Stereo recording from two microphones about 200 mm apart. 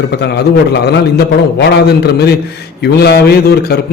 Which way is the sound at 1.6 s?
55° left (ahead or behind).